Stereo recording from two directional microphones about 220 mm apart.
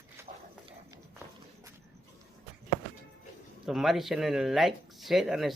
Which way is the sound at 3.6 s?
Centre (ahead or behind).